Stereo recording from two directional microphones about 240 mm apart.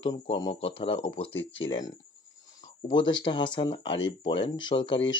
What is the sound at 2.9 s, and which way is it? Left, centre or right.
Speech, centre.